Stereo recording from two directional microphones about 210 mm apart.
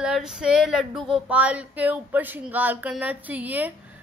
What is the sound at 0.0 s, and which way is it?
Speech, 5° right (ahead or behind).